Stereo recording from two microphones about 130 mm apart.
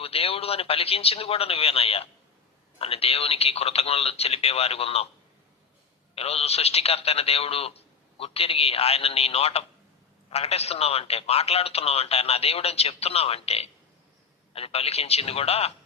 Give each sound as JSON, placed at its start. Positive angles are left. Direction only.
{"t": 0.0, "sound": "a man's voice", "side_deg": 50}
{"t": 6.1, "sound": "a man's voice", "side_deg": 50}